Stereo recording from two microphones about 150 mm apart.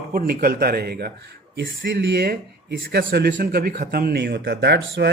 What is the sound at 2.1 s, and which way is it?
Speech, 90° right.